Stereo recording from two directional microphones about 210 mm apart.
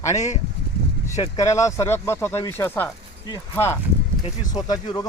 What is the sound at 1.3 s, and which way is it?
Speech, 15° left (ahead or behind).